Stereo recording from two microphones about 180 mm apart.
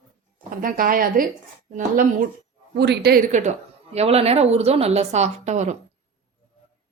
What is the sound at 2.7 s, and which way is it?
Speech, 65° right (ahead or behind).